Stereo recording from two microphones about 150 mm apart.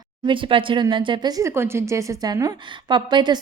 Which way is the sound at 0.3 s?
35° right (ahead or behind).